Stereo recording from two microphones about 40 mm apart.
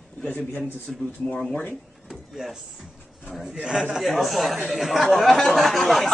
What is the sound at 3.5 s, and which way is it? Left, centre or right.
Speech, centre.